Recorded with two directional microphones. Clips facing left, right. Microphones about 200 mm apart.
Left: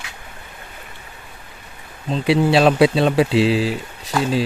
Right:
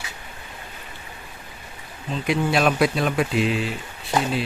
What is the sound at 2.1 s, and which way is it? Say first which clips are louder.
Speech: left 6 dB; 30° left (ahead or behind).